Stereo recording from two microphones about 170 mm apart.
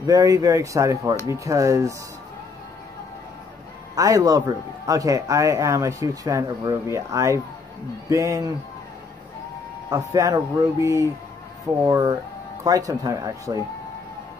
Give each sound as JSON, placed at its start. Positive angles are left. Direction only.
{"t": 0.0, "sound": "speech", "side_deg": -20}
{"t": 3.9, "sound": "speech", "side_deg": -20}
{"t": 9.8, "sound": "speech", "side_deg": -20}